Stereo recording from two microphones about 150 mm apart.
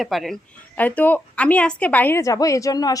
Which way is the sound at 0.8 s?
10° left (ahead or behind).